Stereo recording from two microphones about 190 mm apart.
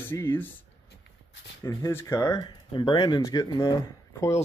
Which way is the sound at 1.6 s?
15° left (ahead or behind).